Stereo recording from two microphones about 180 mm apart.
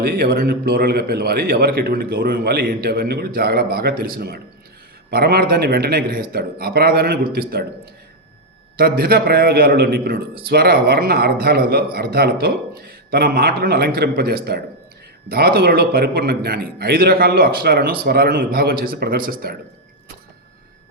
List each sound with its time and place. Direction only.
0.0 s a man's voice: 60° right (ahead or behind)
8.8 s a man's voice: 60° right (ahead or behind)